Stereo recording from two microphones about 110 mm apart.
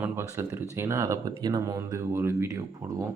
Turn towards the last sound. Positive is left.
turn(degrees=-30)  # may be behind; listen again after turning